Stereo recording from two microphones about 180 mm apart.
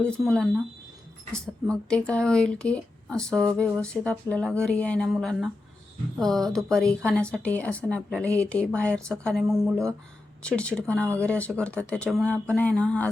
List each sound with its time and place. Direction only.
0.0 s a woman's voice: 5° left (ahead or behind)